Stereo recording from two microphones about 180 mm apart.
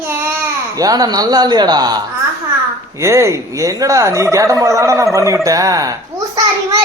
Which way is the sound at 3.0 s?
15° right (ahead or behind).